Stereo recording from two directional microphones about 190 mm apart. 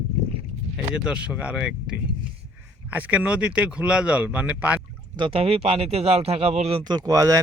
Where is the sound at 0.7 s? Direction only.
5° right (ahead or behind).